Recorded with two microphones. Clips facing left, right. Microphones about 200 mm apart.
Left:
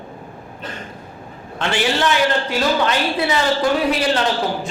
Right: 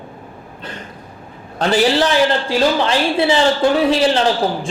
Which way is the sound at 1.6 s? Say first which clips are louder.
Right 5 dB; 35° right (ahead or behind).